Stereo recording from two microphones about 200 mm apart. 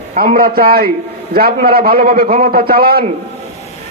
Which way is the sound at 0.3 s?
45° right (ahead or behind).